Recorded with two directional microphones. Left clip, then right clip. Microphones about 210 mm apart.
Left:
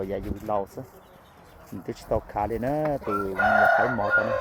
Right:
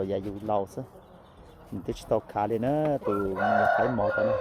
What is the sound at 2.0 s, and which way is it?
Speech, 10° right (ahead or behind).